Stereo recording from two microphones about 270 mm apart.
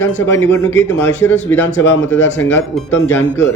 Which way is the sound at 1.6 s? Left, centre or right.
Left.